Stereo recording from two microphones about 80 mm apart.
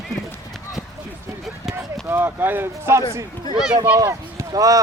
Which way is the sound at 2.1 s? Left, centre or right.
Right.